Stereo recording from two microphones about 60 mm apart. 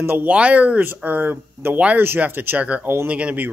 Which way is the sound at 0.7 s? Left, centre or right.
Right.